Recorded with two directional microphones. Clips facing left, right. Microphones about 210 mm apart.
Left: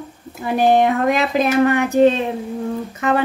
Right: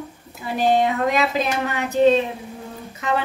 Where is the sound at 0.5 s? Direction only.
50° left (ahead or behind).